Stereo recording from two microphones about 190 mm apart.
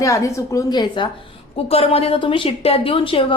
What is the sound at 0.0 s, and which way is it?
A woman's voice, 15° left (ahead or behind).